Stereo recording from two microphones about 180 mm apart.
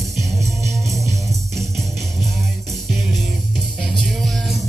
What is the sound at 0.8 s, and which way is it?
Music, 15° right (ahead or behind).